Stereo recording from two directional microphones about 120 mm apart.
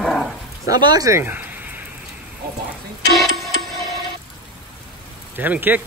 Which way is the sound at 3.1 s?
Centre (ahead or behind).